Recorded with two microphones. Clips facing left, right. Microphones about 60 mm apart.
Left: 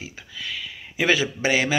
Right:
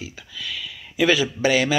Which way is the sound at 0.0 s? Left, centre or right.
Left.